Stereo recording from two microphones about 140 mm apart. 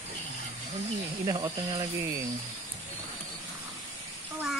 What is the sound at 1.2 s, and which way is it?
Speech, 30° right (ahead or behind).